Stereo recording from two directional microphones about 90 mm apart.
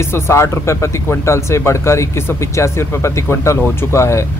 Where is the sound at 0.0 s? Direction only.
30° left (ahead or behind).